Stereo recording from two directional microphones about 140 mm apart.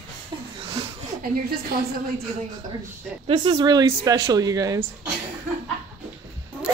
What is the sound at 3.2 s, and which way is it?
A woman's voice, 35° right (ahead or behind).